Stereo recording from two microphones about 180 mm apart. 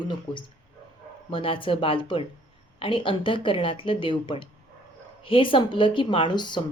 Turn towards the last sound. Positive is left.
turn(degrees=25)  # may be behind; listen again after turning